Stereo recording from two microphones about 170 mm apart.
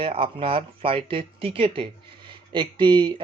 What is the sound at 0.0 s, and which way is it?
A man's voice, 30° right (ahead or behind).